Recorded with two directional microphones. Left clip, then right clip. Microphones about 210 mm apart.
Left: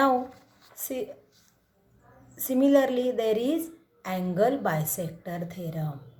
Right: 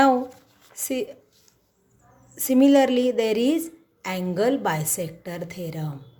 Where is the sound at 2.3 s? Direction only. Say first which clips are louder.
Right 4 dB; 35° right (ahead or behind).